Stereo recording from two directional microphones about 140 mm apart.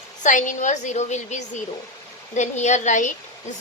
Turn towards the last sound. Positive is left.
turn(degrees=60)  # may be behind; listen again after turning